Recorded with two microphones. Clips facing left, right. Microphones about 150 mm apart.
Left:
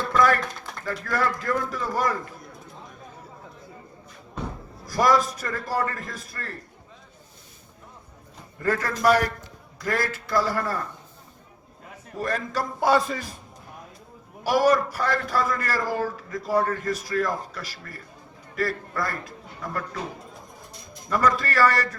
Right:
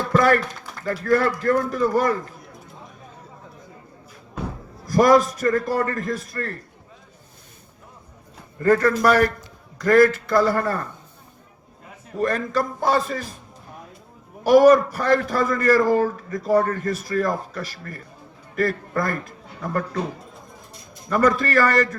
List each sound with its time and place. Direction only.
0.1 s a sound: 50° right (ahead or behind)
0.9 s a man's voice: 45° right (ahead or behind)
4.9 s a man's voice: 50° right (ahead or behind)
8.5 s a man's voice: 50° right (ahead or behind)
12.2 s a man's voice: 50° right (ahead or behind)
14.4 s a man's voice: 50° right (ahead or behind)
21.1 s a man's voice: 50° right (ahead or behind)